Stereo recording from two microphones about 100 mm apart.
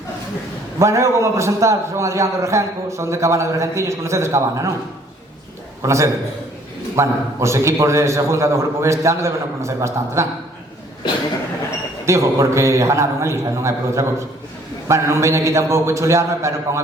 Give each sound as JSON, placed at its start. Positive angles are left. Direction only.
{"t": 0.8, "sound": "a man's voice", "side_deg": -30}
{"t": 5.8, "sound": "a man's voice", "side_deg": -30}
{"t": 12.0, "sound": "a man's voice", "side_deg": -30}